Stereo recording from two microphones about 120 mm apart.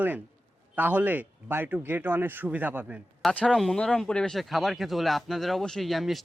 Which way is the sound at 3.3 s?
5° left (ahead or behind).